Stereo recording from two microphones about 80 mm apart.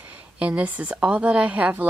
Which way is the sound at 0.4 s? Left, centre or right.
Centre.